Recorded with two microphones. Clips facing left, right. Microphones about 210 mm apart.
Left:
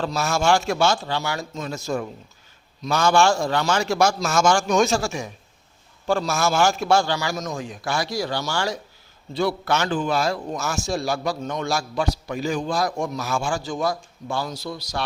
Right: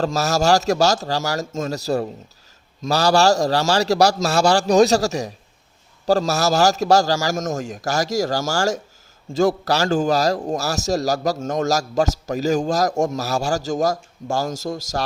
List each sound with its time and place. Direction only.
0.0 s a man's voice: 40° right (ahead or behind)